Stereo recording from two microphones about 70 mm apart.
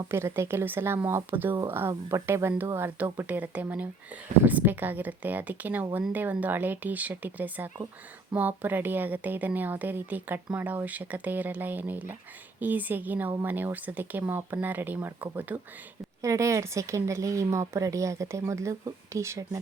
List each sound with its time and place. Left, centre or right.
0.1 s a woman's voice: right
16.2 s speech: right